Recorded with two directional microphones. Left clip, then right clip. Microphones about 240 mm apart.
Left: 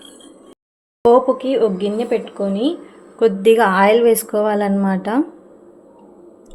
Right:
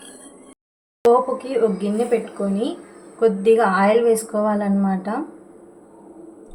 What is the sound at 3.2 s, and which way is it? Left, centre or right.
A woman's voice, left.